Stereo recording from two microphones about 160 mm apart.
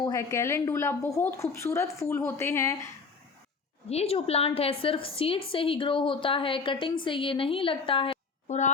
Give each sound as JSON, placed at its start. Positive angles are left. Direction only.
{"t": 0.0, "sound": "speech", "side_deg": 20}
{"t": 3.8, "sound": "a woman's voice", "side_deg": 40}